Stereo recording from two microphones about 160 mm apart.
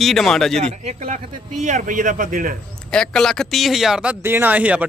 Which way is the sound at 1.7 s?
55° right (ahead or behind).